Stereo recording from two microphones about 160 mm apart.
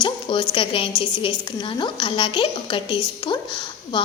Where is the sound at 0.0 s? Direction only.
30° left (ahead or behind).